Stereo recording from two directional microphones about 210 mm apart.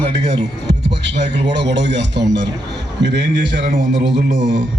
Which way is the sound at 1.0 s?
55° right (ahead or behind).